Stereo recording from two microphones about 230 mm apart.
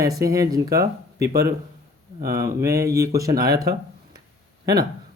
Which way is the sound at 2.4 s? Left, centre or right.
Centre.